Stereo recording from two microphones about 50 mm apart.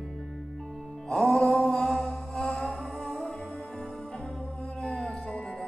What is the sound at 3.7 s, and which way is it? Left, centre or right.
Music, centre.